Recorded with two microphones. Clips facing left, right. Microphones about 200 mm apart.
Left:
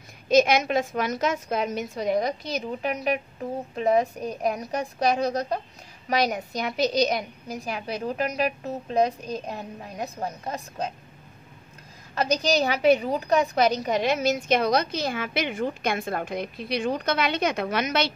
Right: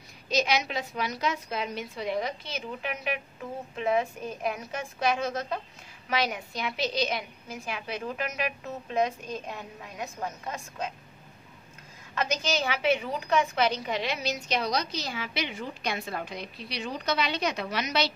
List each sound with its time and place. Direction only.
0.3 s a woman's voice: 50° left (ahead or behind)
12.2 s a woman's voice: 35° left (ahead or behind)